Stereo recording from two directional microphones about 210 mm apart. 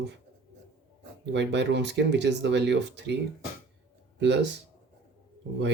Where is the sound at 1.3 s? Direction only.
55° right (ahead or behind).